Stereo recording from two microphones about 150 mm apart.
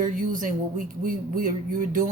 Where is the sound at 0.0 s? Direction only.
60° right (ahead or behind).